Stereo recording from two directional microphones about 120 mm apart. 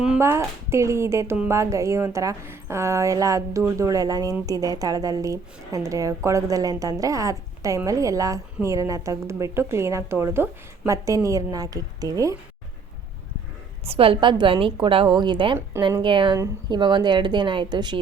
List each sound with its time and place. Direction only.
0.2 s a woman's voice: 20° right (ahead or behind)
13.8 s a woman's voice: 50° right (ahead or behind)